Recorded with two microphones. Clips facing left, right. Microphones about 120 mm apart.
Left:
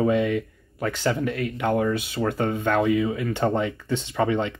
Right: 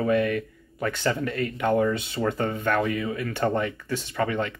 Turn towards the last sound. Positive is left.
turn(degrees=20)  # may be behind; listen again after turning